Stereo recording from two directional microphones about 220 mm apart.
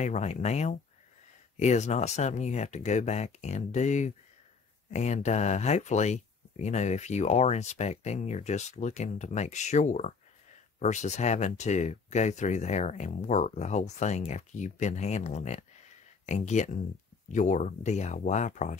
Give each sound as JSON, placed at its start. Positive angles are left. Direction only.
{"t": 0.0, "sound": "speech", "side_deg": 30}